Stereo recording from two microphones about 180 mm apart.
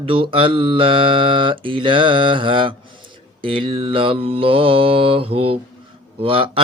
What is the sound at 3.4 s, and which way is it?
Mantra, 30° right (ahead or behind).